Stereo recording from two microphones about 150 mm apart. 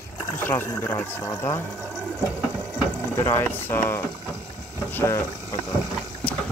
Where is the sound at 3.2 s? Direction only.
15° left (ahead or behind).